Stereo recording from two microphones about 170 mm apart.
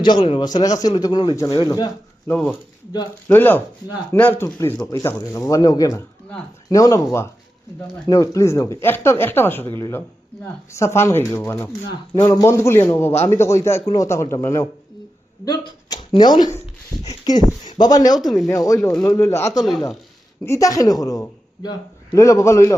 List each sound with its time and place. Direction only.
0.0 s a man's voice: 30° left (ahead or behind)
2.2 s a man's voice: 5° left (ahead or behind); by 18.2 s 25° left (ahead or behind)
18.2 s speech: centre (ahead or behind)
18.5 s a man's voice: 20° left (ahead or behind)